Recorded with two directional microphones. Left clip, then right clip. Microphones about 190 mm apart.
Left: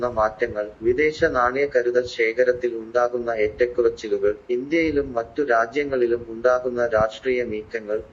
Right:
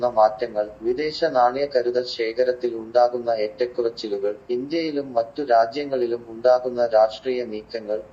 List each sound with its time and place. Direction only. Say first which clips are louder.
0.0 s a man's voice: right 3 dB; 30° left (ahead or behind)